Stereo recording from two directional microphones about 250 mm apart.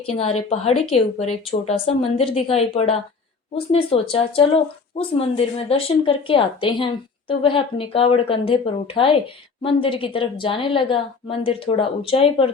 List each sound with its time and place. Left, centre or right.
0.1 s speech: left